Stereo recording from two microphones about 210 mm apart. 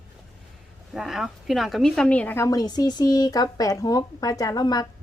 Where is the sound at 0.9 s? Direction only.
Centre (ahead or behind).